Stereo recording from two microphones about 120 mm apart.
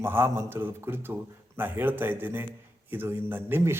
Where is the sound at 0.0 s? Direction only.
20° right (ahead or behind).